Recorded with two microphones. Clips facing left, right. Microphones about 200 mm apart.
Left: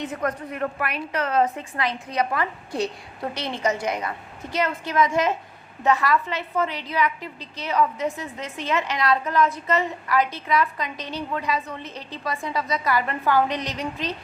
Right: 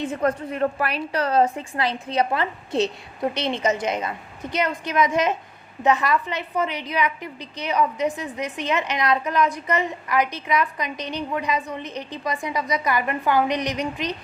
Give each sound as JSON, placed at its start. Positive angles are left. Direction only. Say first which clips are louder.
{"t": 0.0, "sound": "a woman's voice", "louder": "right 4 dB", "side_deg": -30}